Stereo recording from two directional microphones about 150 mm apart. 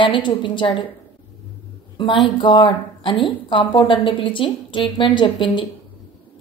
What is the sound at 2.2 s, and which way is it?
A woman's voice, 30° left (ahead or behind).